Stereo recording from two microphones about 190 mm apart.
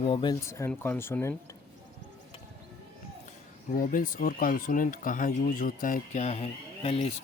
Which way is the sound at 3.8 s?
45° left (ahead or behind).